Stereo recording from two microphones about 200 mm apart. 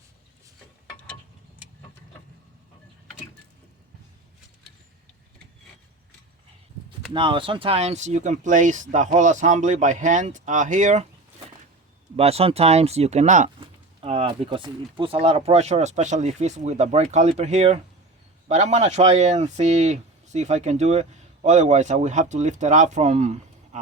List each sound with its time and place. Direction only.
7.1 s speech: 25° right (ahead or behind)
12.1 s speech: 30° right (ahead or behind)